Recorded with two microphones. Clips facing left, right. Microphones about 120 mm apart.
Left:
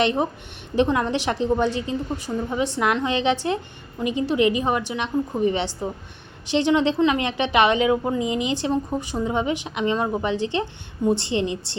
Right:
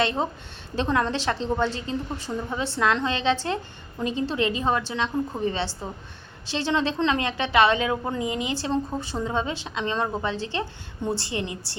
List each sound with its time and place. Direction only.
0.0 s a woman's voice: 20° left (ahead or behind)